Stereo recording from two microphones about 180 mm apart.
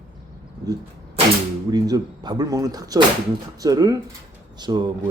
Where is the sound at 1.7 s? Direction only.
20° right (ahead or behind).